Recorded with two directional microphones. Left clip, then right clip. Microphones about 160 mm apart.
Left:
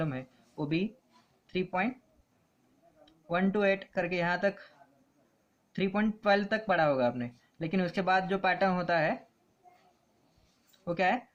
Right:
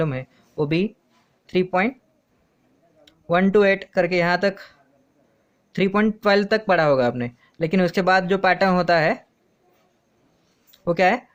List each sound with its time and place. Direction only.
0.0 s speech: 65° right (ahead or behind)
3.0 s speech: 65° right (ahead or behind)
5.7 s speech: 65° right (ahead or behind)
10.7 s a sound: 65° right (ahead or behind)